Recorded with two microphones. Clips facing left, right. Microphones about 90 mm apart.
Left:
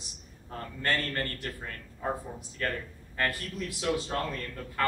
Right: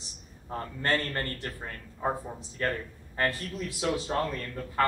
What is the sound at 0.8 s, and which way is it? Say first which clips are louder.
A man's voice: right 1 dB; 25° right (ahead or behind).